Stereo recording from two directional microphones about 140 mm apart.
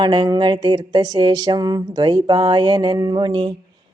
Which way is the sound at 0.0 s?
30° right (ahead or behind).